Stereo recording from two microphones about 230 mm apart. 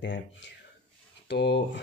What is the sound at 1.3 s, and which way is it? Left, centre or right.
Speech, left.